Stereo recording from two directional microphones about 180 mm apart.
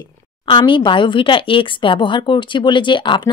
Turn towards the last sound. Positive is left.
turn(degrees=25)  # may be behind; listen again after turning